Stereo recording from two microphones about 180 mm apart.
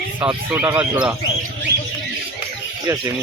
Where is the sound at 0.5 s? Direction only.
10° right (ahead or behind).